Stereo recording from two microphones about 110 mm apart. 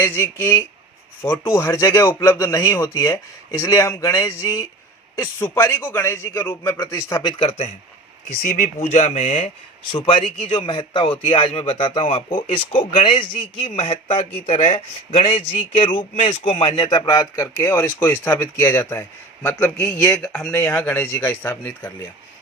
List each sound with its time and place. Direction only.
0.2 s speech: 20° left (ahead or behind)
7.4 s a man's voice: 65° left (ahead or behind)
8.4 s speech: 90° left
9.9 s a man's voice: 55° left (ahead or behind)
17.1 s speech: 30° left (ahead or behind); by 20.5 s 5° left (ahead or behind)
20.5 s speech: 15° left (ahead or behind)